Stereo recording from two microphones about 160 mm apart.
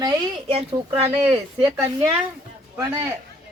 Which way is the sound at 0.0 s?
35° right (ahead or behind).